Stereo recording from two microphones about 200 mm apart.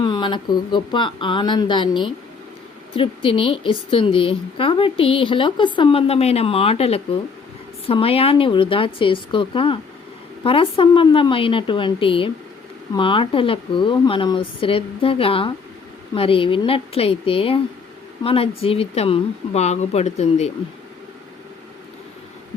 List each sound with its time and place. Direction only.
0.0 s speech: 25° left (ahead or behind)
3.2 s speech: 25° left (ahead or behind)